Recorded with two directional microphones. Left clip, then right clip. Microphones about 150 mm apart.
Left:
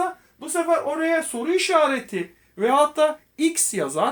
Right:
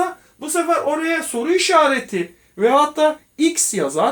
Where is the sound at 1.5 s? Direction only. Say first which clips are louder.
Right 5 dB; 20° left (ahead or behind).